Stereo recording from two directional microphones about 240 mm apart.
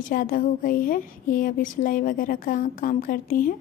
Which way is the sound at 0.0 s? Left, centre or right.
Left.